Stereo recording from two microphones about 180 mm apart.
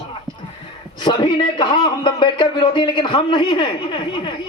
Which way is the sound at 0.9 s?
25° left (ahead or behind).